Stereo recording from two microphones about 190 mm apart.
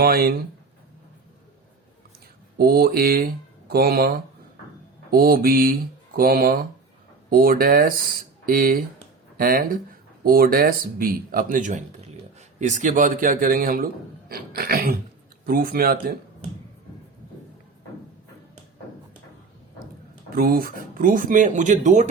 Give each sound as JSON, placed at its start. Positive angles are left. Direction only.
{"t": 0.0, "sound": "a man's voice", "side_deg": -55}
{"t": 2.6, "sound": "a man's voice", "side_deg": -50}
{"t": 5.1, "sound": "a man's voice", "side_deg": -50}
{"t": 20.3, "sound": "a man's voice", "side_deg": -50}